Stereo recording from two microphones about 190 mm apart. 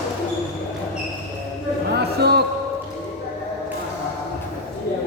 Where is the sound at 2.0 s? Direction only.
60° right (ahead or behind).